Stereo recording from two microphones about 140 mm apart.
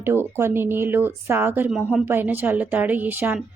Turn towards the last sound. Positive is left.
turn(degrees=-10)  # may be behind; listen again after turning